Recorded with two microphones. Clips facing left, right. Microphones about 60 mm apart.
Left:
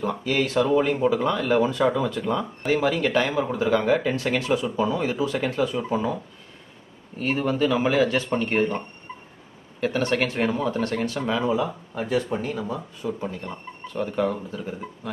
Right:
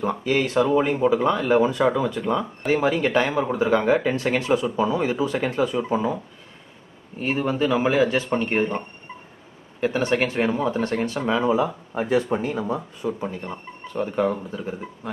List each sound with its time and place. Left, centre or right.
0.0 s speech: centre
1.5 s speech: centre
2.7 s speech: centre
4.6 s speech: centre
13.2 s speech: centre